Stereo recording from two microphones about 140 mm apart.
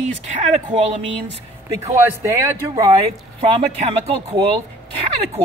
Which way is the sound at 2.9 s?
40° right (ahead or behind).